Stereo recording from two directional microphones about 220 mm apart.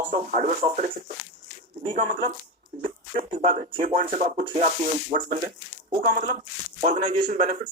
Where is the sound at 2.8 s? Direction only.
25° right (ahead or behind).